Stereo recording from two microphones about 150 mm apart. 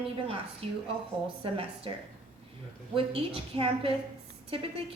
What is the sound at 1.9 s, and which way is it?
A woman's voice, 35° right (ahead or behind).